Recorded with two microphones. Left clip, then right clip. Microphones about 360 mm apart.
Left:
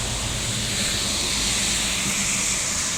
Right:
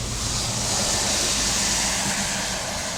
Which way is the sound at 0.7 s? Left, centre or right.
Right.